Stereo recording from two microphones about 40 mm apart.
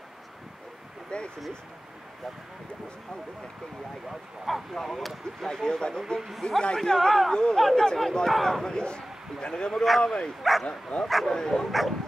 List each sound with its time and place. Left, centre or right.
1.1 s speech: left
4.5 s speech: centre
5.5 s a man's voice: centre
6.9 s speech: centre
8.6 s a man's voice: left
10.4 s speech: centre
10.7 s a man's voice: left
11.6 s speech: centre